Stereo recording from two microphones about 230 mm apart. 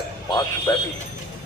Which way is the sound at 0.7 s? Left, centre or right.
Centre.